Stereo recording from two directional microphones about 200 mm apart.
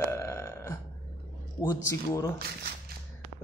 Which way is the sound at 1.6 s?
15° left (ahead or behind).